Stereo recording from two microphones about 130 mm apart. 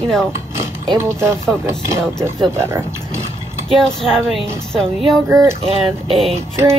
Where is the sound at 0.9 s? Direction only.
20° right (ahead or behind).